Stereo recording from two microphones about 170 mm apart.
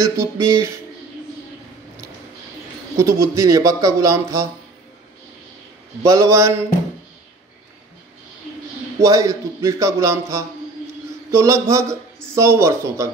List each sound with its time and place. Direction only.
0.0 s a man's voice: 15° right (ahead or behind)
3.0 s speech: 20° right (ahead or behind)
6.0 s a man's voice: 20° right (ahead or behind)
9.0 s a man's voice: 20° right (ahead or behind)